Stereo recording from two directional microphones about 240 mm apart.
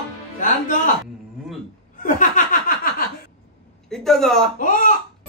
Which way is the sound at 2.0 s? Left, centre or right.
Left.